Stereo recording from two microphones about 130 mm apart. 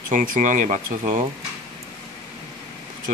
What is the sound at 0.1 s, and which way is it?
Speech, 85° right.